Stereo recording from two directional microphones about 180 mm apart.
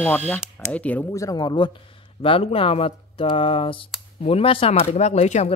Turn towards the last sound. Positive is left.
turn(degrees=40)  # may be behind; listen again after turning